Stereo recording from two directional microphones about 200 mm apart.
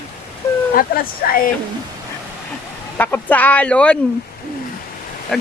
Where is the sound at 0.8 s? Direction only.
45° left (ahead or behind).